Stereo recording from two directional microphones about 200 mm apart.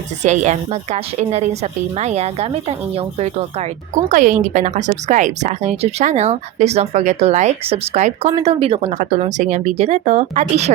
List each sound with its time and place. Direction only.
0.2 s speech: 35° right (ahead or behind)